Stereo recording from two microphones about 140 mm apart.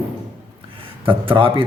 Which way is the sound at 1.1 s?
40° right (ahead or behind).